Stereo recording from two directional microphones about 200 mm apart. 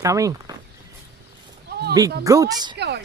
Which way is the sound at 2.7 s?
55° right (ahead or behind).